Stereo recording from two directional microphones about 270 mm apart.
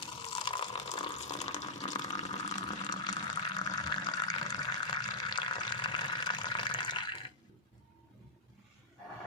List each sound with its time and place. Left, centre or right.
0.3 s water: centre